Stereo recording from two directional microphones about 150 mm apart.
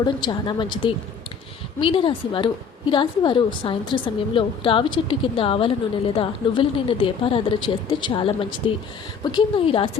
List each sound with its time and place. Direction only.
0.0 s a woman's voice: 30° left (ahead or behind)